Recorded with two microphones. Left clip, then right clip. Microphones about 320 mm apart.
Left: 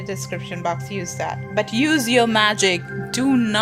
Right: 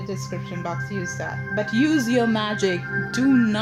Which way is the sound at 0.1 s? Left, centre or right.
Left.